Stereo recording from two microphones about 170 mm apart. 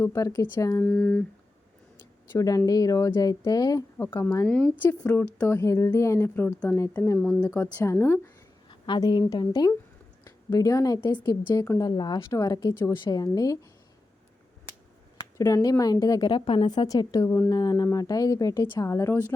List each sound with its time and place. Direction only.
0.0 s a woman's voice: 20° left (ahead or behind)
0.9 s a woman's voice: 5° left (ahead or behind)
2.3 s a woman's voice: 15° left (ahead or behind)
7.2 s speech: centre (ahead or behind)
7.5 s a woman's voice: 15° left (ahead or behind)
8.7 s a woman's voice: 25° left (ahead or behind)
15.4 s a woman's voice: 20° left (ahead or behind)